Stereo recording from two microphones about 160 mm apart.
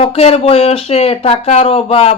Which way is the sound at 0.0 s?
35° left (ahead or behind).